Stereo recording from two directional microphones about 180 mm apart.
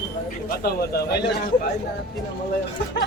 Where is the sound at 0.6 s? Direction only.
60° left (ahead or behind).